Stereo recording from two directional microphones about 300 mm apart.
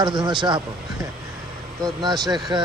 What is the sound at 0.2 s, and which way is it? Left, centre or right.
Speech, centre.